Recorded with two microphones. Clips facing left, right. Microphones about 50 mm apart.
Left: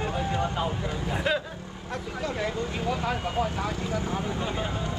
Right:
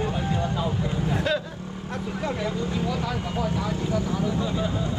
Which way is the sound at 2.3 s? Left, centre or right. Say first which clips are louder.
Right 2 dB; left.